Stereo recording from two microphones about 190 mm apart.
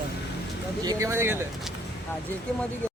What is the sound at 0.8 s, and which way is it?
Speech, 20° right (ahead or behind).